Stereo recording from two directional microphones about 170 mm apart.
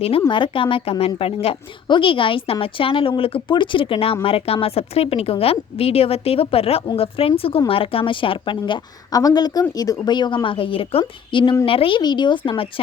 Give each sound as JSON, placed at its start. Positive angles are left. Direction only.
{"t": 0.3, "sound": "a woman's voice", "side_deg": 30}